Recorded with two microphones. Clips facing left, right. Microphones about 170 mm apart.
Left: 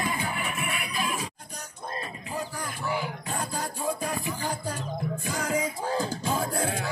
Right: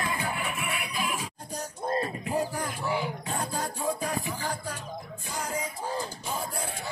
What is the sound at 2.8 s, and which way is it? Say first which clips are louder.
Music: left 1 dB; centre (ahead or behind).